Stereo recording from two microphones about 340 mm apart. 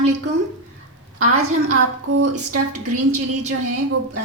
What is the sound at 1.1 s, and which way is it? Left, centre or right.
A woman's voice, right.